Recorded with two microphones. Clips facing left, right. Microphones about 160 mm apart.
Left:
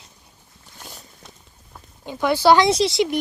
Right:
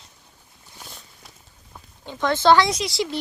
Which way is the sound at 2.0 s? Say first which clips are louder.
Left 2 dB; 15° left (ahead or behind).